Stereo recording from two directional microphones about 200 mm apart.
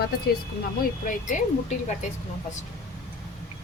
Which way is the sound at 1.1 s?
40° left (ahead or behind).